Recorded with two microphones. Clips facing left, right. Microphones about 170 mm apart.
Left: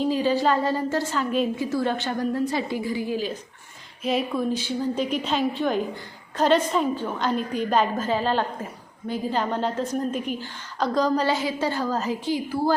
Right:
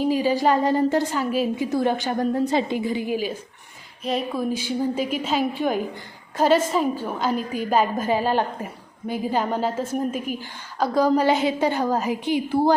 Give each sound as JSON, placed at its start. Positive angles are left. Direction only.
{"t": 0.0, "sound": "a woman's voice", "side_deg": -10}
{"t": 4.0, "sound": "a woman's voice", "side_deg": 0}
{"t": 4.5, "sound": "a woman's voice", "side_deg": -10}